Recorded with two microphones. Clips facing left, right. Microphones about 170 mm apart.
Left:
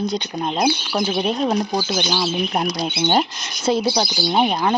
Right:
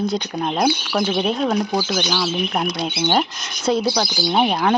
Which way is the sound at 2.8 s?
25° left (ahead or behind).